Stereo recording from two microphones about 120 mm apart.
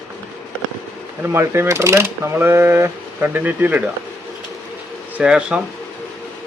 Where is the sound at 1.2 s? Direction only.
20° right (ahead or behind).